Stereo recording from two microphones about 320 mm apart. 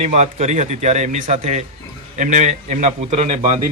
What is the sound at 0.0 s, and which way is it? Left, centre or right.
A man's voice, right.